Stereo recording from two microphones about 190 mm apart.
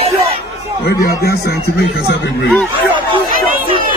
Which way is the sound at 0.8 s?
55° left (ahead or behind).